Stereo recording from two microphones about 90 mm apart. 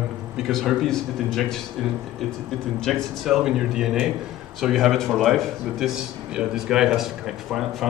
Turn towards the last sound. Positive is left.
turn(degrees=-5)  # may be behind; listen again after turning